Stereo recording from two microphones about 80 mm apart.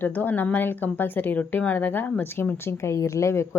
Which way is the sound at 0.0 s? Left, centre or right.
Left.